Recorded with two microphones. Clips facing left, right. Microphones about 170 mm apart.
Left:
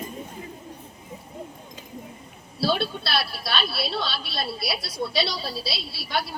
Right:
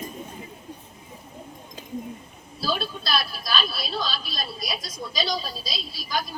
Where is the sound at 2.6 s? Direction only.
70° left (ahead or behind).